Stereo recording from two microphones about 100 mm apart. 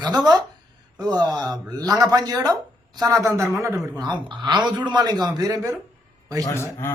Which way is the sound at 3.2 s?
30° right (ahead or behind).